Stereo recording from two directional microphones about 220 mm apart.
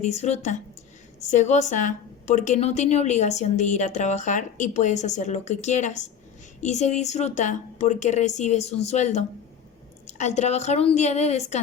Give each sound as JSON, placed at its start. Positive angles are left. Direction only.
{"t": 0.0, "sound": "a woman's voice", "side_deg": 30}